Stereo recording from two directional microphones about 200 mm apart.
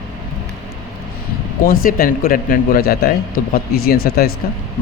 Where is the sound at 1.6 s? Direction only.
45° left (ahead or behind).